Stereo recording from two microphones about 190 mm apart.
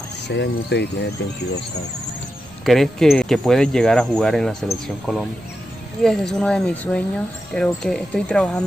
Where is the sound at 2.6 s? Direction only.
Centre (ahead or behind).